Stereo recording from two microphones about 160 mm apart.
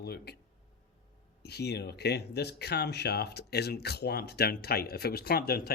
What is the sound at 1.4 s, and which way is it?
Speech, 90° left.